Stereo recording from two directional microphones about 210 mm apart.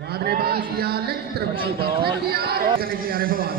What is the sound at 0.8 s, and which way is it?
A man's voice, 50° right (ahead or behind).